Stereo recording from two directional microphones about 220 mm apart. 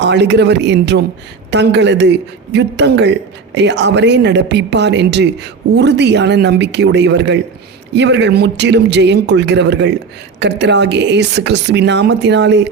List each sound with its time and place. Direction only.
0.0 s a man's voice: 50° right (ahead or behind)